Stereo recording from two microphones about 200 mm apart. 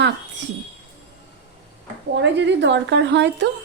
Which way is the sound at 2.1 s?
60° right (ahead or behind).